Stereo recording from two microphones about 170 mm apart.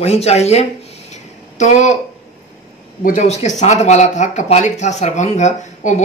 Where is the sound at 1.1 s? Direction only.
45° left (ahead or behind).